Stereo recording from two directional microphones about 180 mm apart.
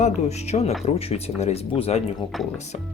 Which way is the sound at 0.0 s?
40° left (ahead or behind).